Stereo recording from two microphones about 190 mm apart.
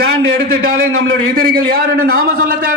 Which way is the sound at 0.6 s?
90° right.